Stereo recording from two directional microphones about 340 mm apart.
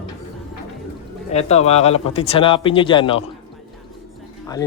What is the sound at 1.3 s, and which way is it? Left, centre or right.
Speech, centre.